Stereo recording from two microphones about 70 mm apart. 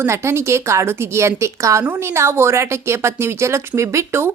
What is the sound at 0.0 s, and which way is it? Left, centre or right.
A woman's voice, right.